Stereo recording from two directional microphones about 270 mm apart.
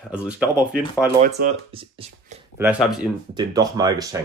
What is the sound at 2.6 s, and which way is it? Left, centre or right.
A man's voice, centre.